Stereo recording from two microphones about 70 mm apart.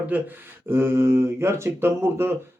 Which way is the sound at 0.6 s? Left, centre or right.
Right.